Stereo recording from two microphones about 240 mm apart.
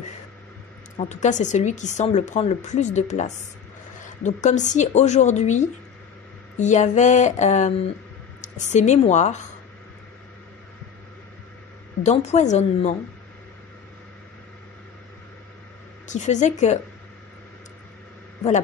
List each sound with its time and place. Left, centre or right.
0.9 s a woman's voice: left
12.0 s speech: left
16.1 s speech: left